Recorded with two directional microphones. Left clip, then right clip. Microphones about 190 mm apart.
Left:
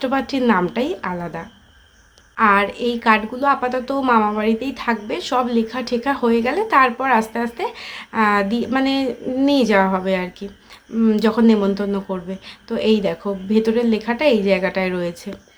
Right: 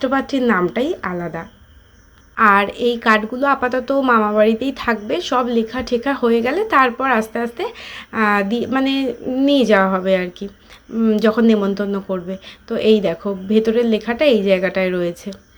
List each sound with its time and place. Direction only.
0.0 s a woman's voice: 10° right (ahead or behind)